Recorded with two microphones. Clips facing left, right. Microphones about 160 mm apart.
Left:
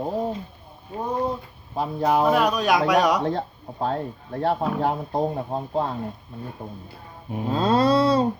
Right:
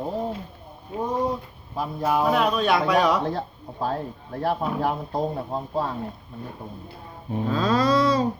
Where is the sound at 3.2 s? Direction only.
25° left (ahead or behind).